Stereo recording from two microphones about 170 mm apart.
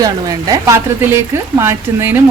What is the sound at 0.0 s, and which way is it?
Speech, 20° right (ahead or behind).